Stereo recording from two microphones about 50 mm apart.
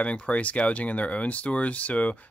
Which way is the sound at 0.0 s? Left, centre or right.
Left.